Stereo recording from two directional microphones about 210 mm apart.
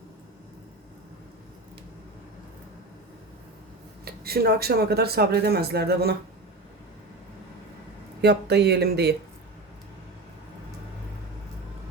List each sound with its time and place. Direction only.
4.0 s speech: 45° right (ahead or behind)
8.2 s speech: 50° right (ahead or behind)